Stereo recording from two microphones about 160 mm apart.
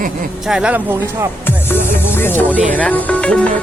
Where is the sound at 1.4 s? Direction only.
15° left (ahead or behind).